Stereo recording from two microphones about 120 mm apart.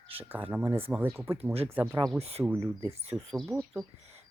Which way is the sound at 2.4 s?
20° right (ahead or behind).